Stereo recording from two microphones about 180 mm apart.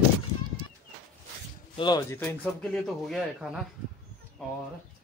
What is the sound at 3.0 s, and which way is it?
Speech, centre (ahead or behind).